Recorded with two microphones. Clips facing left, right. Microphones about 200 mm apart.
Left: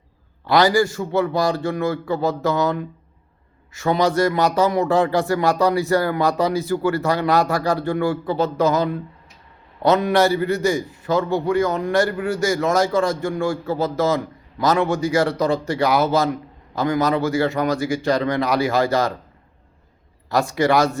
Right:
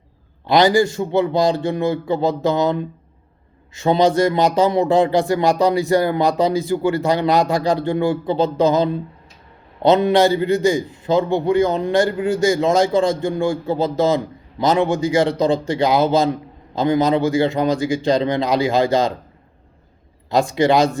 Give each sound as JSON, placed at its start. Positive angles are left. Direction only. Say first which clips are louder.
{"t": 0.4, "sound": "a man's voice", "louder": "right 2 dB", "side_deg": -20}
{"t": 20.3, "sound": "a man's voice", "louder": "right 2 dB", "side_deg": -15}